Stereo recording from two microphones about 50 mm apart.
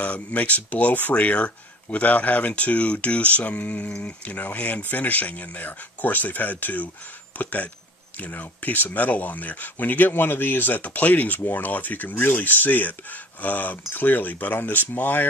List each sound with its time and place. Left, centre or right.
0.0 s speech: left